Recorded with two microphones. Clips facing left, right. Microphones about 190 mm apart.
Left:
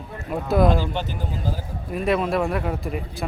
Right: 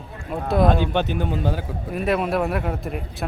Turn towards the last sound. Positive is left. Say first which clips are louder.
# even
turn(degrees=0)  # may be behind; listen again after turning